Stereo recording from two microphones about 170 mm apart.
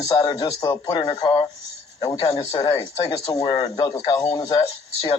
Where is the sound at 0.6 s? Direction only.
25° left (ahead or behind).